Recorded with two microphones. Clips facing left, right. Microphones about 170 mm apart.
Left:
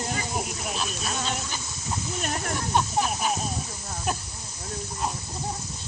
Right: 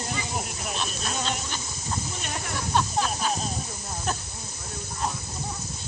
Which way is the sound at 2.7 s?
15° left (ahead or behind).